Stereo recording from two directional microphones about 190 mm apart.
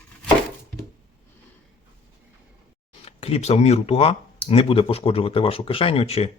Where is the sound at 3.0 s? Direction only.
30° left (ahead or behind).